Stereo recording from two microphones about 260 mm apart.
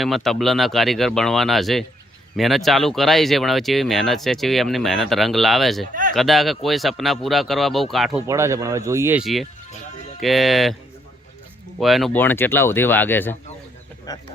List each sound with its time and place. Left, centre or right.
0.0 s speech: centre
5.9 s a sound: right
6.1 s speech: centre
8.3 s speech: centre
11.8 s speech: centre